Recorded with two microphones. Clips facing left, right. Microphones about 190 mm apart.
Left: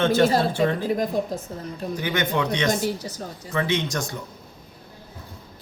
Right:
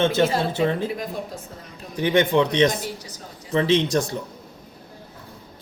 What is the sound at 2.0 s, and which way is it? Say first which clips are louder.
Speech: right 7 dB; 30° right (ahead or behind).